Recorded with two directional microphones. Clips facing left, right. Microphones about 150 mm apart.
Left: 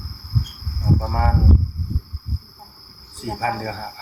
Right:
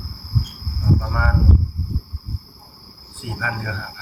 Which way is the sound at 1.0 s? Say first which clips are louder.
Left 2 dB; 35° left (ahead or behind).